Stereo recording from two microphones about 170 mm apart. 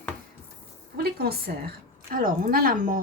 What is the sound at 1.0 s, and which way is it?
A woman's voice, 65° right (ahead or behind).